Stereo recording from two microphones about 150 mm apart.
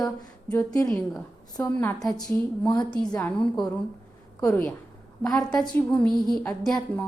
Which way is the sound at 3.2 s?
5° left (ahead or behind).